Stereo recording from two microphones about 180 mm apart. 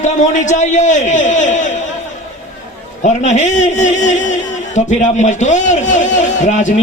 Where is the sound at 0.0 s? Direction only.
40° left (ahead or behind).